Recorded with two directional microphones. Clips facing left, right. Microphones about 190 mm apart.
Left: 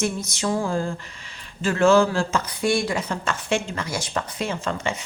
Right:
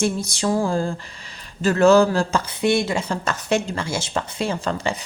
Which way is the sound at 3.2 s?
40° right (ahead or behind).